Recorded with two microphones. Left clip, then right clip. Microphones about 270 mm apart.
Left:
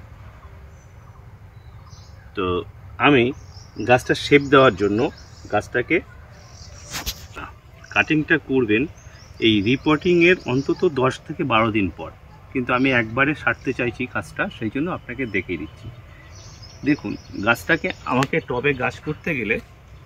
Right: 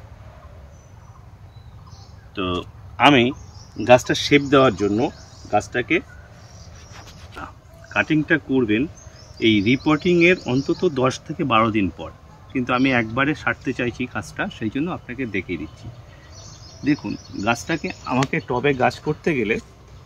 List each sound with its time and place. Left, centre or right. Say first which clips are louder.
2.3 s speech: left 2 dB; centre
7.3 s a sound: even; centre
9.4 s speech: even; centre
16.8 s speech: even; centre
18.3 s speech: even; centre